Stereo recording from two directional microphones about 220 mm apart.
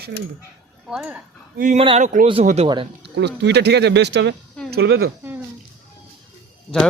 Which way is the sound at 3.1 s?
50° right (ahead or behind).